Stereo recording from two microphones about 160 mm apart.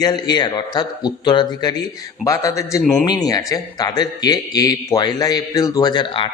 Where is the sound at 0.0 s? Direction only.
25° left (ahead or behind).